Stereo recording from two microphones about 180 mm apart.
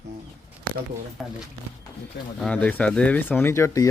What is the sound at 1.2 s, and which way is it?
Speech, centre (ahead or behind).